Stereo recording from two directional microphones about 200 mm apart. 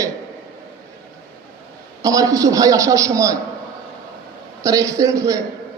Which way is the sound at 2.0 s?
15° right (ahead or behind).